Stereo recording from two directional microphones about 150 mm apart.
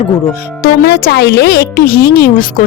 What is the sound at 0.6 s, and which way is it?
Speech, 90° left.